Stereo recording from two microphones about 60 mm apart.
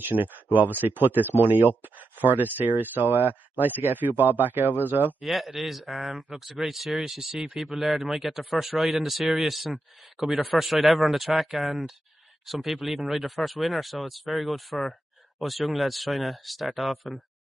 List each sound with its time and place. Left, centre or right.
0.0 s speech: right
5.2 s speech: centre